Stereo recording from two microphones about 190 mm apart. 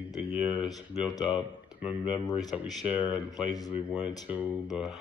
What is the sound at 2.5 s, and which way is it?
Speech, 5° right (ahead or behind).